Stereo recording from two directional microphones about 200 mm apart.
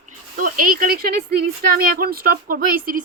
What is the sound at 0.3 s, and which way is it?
Speech, 45° right (ahead or behind).